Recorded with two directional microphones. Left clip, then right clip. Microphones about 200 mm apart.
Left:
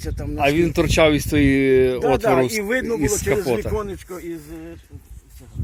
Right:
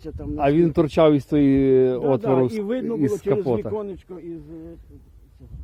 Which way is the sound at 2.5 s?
35° right (ahead or behind).